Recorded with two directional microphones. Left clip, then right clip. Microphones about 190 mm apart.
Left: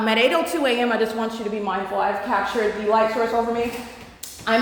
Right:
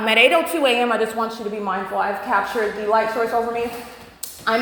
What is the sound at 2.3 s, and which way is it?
Speech, 5° left (ahead or behind).